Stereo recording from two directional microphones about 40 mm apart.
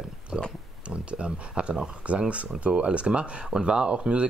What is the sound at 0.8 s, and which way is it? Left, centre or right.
Speech, right.